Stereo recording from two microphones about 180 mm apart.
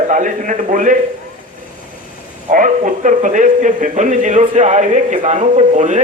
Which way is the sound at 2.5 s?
45° right (ahead or behind).